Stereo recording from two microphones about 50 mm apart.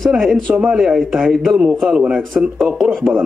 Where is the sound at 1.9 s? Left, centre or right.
Centre.